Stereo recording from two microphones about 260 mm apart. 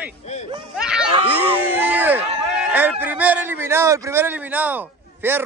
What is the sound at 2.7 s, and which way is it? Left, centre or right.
A man's voice, centre.